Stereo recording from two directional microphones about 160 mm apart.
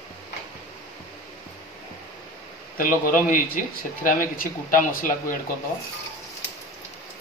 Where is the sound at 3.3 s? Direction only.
60° left (ahead or behind).